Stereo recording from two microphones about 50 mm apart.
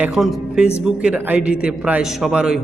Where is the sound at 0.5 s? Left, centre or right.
Centre.